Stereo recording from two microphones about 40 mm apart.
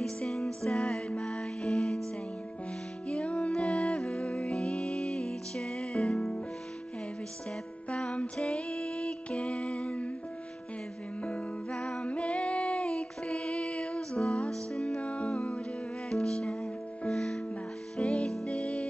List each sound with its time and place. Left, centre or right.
0.0 s music: centre
3.1 s music: left
7.9 s music: left
11.2 s music: left
16.1 s music: centre